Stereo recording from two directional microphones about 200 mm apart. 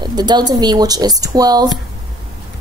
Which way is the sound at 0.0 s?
20° right (ahead or behind).